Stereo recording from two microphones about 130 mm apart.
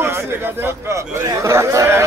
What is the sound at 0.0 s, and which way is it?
Speech, 20° right (ahead or behind).